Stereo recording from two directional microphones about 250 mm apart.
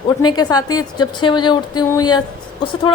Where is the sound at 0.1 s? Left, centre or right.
Centre.